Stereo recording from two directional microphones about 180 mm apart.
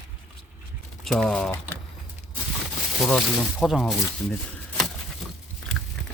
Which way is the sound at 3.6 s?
Centre (ahead or behind).